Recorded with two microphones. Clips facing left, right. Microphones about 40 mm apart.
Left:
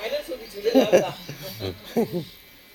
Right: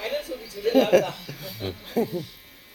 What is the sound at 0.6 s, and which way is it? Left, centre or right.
Speech, centre.